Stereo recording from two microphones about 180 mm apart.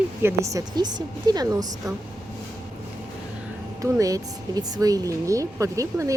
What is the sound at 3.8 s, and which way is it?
Speech, 20° right (ahead or behind).